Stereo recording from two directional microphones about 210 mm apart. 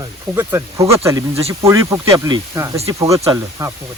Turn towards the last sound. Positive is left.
turn(degrees=-15)  # may be behind; listen again after turning